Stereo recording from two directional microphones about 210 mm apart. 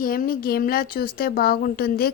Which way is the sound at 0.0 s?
45° left (ahead or behind).